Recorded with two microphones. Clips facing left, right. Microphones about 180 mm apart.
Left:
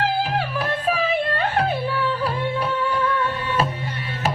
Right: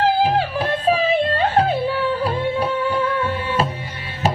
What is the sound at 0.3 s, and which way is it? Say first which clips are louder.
Music: right 4 dB; 25° right (ahead or behind).